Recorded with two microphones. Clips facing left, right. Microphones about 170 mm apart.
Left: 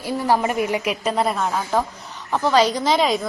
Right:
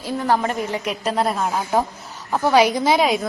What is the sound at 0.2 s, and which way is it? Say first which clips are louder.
A woman's voice: left 1 dB; 10° left (ahead or behind).